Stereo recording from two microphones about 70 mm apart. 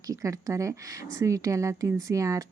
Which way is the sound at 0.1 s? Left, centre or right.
Right.